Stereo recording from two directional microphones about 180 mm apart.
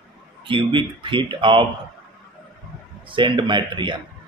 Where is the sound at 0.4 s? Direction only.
30° right (ahead or behind).